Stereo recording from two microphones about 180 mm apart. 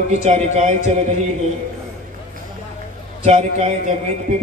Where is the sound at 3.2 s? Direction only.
35° right (ahead or behind).